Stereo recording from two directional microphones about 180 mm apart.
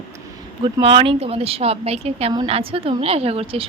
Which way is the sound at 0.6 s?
30° right (ahead or behind).